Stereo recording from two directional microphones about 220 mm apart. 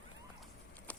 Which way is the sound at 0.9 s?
5° left (ahead or behind).